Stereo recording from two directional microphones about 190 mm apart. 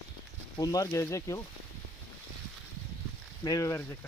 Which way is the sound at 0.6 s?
20° left (ahead or behind).